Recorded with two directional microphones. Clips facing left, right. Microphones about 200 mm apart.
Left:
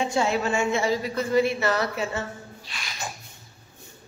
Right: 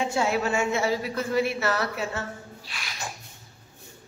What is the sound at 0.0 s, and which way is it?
Speech, 5° right (ahead or behind).